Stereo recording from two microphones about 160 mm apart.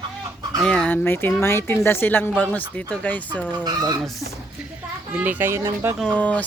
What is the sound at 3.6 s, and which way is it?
Speech, 25° right (ahead or behind).